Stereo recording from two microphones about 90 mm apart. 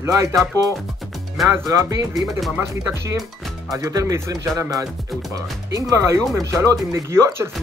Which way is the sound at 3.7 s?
35° right (ahead or behind).